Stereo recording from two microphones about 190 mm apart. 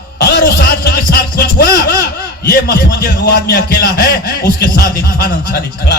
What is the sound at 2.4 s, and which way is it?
A man's voice, 55° left (ahead or behind).